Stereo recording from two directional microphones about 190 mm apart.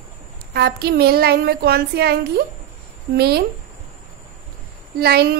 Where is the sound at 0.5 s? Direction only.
60° right (ahead or behind).